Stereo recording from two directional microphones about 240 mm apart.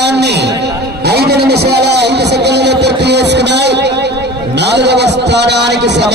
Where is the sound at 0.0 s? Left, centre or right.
Right.